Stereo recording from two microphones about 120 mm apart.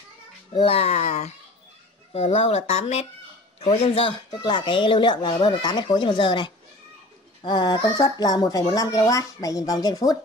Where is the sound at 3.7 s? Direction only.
50° left (ahead or behind).